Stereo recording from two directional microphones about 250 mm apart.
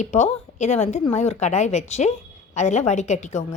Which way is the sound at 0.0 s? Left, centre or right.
Left.